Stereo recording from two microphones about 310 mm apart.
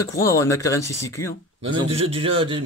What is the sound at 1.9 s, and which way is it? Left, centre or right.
Speech, centre.